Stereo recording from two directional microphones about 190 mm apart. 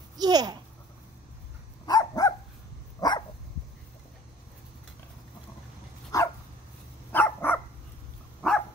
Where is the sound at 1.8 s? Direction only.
20° left (ahead or behind).